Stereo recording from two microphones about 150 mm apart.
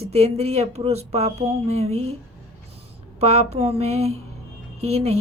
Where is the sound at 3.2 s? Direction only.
45° right (ahead or behind).